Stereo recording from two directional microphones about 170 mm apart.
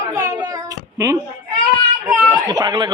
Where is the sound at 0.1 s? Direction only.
20° right (ahead or behind).